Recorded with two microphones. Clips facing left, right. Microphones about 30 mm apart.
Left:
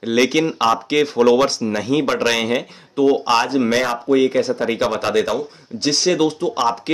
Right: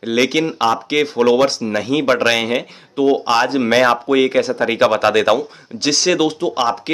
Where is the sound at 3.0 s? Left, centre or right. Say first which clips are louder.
Right 1 dB; right.